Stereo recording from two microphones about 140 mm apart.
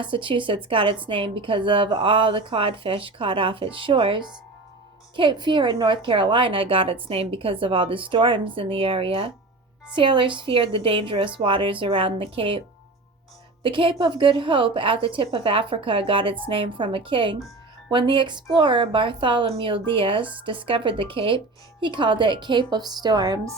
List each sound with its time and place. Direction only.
0.0 s a woman's voice: 35° right (ahead or behind)